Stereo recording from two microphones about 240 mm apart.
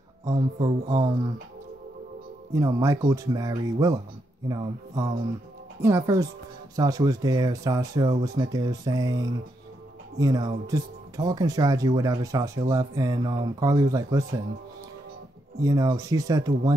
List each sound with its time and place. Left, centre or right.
0.3 s speech: right
2.5 s speech: centre
15.6 s speech: centre